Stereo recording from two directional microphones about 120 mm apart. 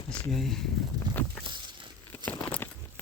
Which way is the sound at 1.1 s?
35° right (ahead or behind).